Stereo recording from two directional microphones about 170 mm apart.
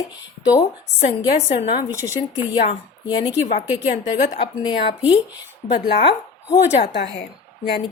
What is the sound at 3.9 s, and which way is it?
Speech, 45° left (ahead or behind).